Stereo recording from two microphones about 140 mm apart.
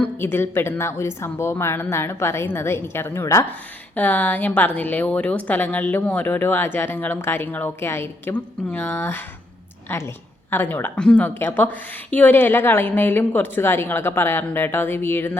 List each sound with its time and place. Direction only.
0.0 s a woman's voice: 15° left (ahead or behind)